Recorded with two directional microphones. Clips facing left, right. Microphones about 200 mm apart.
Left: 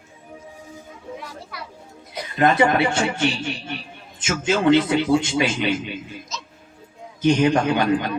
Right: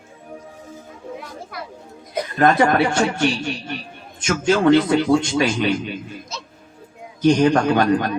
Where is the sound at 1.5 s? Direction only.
50° right (ahead or behind).